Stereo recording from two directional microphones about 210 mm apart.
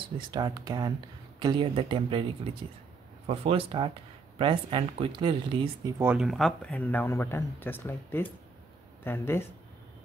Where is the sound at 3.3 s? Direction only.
30° right (ahead or behind).